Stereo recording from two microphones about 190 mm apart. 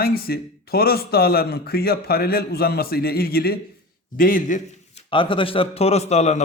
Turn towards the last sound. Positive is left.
turn(degrees=35)  # may be behind; listen again after turning